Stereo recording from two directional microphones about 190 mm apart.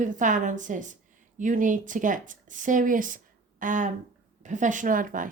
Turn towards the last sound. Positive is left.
turn(degrees=-45)  # may be behind; listen again after turning